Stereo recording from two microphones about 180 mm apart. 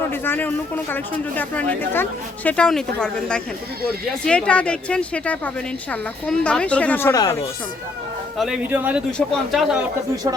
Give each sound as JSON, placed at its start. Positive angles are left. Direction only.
{"t": 0.1, "sound": "speech", "side_deg": 10}
{"t": 7.1, "sound": "speech", "side_deg": 20}
{"t": 8.4, "sound": "speech", "side_deg": -5}